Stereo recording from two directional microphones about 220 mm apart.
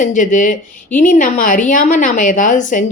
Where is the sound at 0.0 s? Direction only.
35° left (ahead or behind).